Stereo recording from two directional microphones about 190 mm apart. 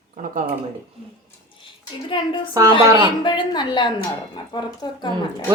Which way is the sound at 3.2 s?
25° left (ahead or behind).